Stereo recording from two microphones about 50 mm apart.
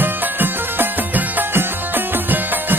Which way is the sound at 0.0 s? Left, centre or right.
Right.